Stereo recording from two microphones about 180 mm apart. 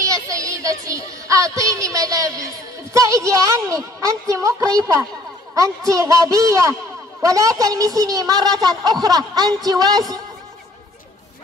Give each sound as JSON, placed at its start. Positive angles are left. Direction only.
{"t": 0.0, "sound": "speech", "side_deg": -20}